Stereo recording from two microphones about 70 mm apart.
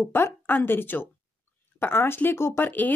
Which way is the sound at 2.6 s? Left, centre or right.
Left.